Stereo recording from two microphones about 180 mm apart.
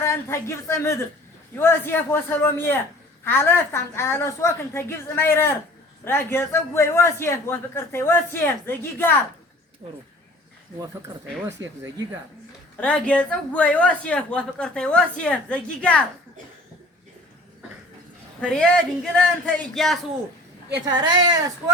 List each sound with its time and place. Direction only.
0.0 s a man's voice: 15° left (ahead or behind)
11.4 s speech: 15° right (ahead or behind)
12.8 s a man's voice: 5° left (ahead or behind)
18.3 s speech: 5° left (ahead or behind)
20.8 s speech: 25° right (ahead or behind)